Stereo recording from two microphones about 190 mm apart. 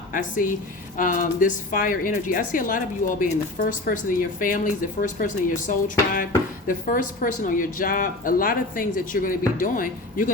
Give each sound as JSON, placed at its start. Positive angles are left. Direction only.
{"t": 0.1, "sound": "a woman's voice", "side_deg": 45}